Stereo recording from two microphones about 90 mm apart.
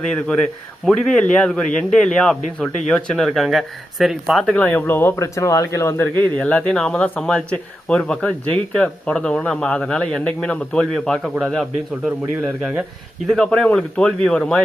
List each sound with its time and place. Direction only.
0.9 s speech: 10° left (ahead or behind)
4.5 s speech: 20° left (ahead or behind)
6.1 s speech: 15° left (ahead or behind)
13.2 s speech: 5° left (ahead or behind)